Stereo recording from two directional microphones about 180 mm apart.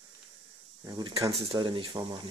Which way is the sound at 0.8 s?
20° right (ahead or behind).